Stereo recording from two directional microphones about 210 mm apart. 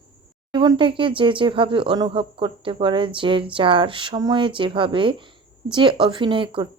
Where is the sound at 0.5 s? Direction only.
25° right (ahead or behind).